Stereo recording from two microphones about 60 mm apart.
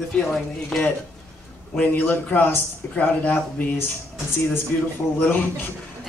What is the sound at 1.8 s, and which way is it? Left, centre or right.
A man's voice, left.